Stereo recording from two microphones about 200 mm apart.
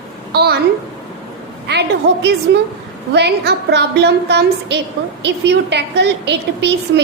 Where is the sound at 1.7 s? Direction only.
55° right (ahead or behind).